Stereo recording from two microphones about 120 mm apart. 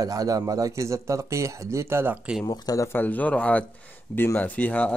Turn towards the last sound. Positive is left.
turn(degrees=10)  # may be behind; listen again after turning